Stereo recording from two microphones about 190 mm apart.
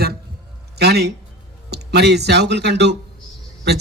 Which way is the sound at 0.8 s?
60° right (ahead or behind).